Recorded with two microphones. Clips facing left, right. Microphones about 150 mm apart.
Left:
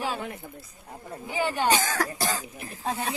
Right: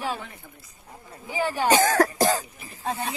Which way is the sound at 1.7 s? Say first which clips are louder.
Right 6 dB; 45° right (ahead or behind).